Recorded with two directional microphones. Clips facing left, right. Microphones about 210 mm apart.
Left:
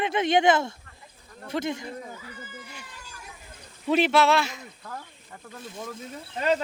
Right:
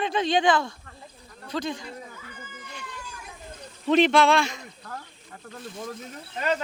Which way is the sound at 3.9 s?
5° left (ahead or behind).